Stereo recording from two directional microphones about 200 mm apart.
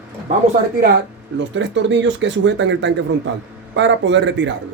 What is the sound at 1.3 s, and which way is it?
Speech, 65° right (ahead or behind).